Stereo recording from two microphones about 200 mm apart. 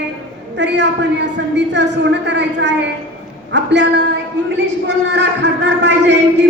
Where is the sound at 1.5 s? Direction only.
60° right (ahead or behind).